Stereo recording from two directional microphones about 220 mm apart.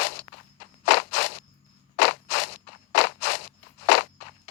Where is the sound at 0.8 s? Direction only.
50° left (ahead or behind).